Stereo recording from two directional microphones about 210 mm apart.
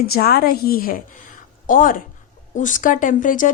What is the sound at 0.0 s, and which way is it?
A woman's voice, 45° left (ahead or behind).